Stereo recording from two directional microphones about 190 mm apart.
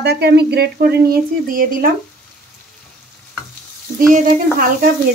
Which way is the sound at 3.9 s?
45° right (ahead or behind).